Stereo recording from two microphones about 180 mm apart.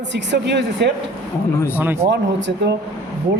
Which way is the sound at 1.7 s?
10° right (ahead or behind).